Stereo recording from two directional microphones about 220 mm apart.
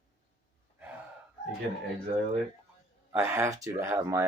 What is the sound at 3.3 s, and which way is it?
Speech, 10° right (ahead or behind).